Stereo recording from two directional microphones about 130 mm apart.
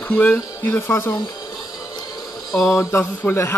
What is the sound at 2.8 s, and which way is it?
Mantra, 20° left (ahead or behind).